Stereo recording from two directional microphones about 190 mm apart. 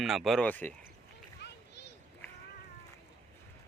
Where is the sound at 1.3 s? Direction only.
60° left (ahead or behind).